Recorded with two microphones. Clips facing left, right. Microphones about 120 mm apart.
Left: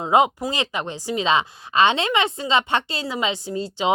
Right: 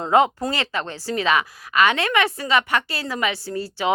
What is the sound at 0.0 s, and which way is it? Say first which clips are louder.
A woman's voice: even; 15° left (ahead or behind).